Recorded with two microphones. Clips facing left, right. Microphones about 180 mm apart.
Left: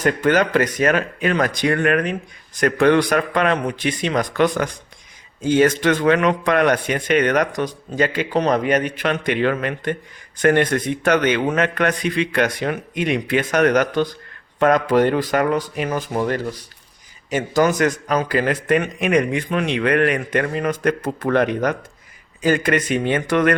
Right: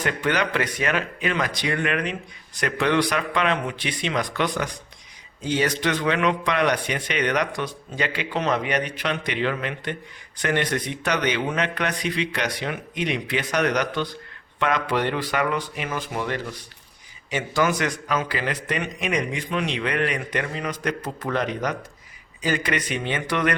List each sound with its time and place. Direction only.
0.0 s speech: 45° left (ahead or behind)